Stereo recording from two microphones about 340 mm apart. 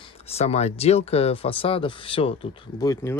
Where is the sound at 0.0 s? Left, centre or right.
Centre.